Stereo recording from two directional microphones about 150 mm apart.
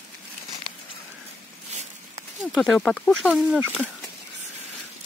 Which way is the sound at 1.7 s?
50° right (ahead or behind).